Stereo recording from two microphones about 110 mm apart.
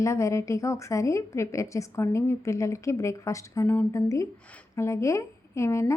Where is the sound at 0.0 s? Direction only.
25° left (ahead or behind).